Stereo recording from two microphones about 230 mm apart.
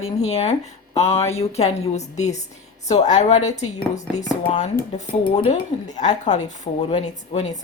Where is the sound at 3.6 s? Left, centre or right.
Left.